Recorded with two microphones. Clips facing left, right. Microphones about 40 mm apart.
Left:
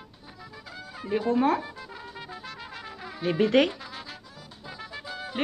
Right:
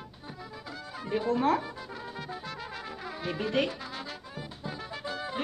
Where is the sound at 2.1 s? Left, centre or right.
Centre.